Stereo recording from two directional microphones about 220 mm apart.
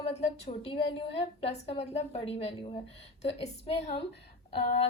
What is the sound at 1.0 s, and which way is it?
A woman's voice, 25° left (ahead or behind).